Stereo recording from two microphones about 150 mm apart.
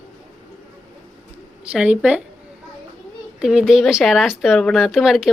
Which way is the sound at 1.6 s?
5° right (ahead or behind).